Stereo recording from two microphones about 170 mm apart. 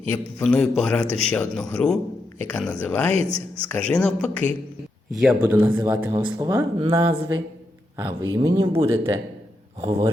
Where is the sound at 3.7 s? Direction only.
5° left (ahead or behind); by 6.2 s 10° right (ahead or behind).